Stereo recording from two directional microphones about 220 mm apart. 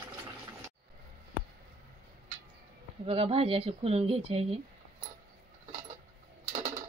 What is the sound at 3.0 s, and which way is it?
Speech, 25° right (ahead or behind).